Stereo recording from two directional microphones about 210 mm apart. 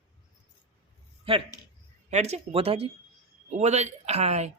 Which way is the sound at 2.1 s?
30° right (ahead or behind).